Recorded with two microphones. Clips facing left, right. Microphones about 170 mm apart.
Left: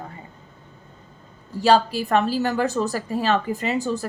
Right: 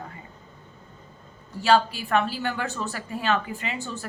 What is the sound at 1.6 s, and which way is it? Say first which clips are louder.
A woman's voice: left 3 dB; 35° left (ahead or behind).